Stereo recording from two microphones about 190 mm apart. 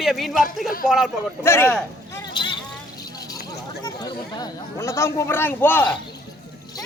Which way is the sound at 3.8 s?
20° left (ahead or behind).